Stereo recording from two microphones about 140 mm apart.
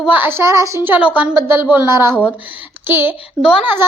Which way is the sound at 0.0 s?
10° right (ahead or behind).